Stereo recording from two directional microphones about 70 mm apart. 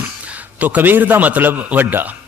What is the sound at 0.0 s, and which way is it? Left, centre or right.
A man's voice, right.